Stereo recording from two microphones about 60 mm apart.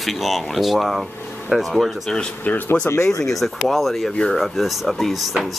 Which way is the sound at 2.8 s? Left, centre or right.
Left.